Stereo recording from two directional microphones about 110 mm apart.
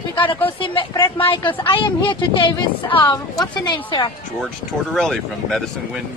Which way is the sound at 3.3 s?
40° left (ahead or behind).